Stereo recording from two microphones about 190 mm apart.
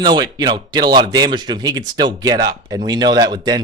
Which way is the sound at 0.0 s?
20° right (ahead or behind).